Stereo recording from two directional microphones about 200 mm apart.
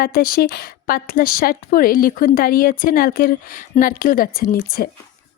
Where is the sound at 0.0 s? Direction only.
50° left (ahead or behind).